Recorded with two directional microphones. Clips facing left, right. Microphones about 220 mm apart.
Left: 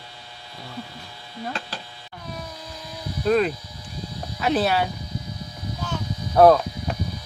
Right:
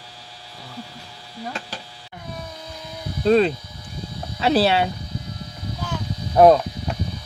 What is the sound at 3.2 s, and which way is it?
Speech, 25° right (ahead or behind).